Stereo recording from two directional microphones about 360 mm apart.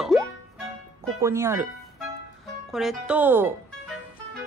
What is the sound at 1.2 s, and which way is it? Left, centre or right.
Speech, centre.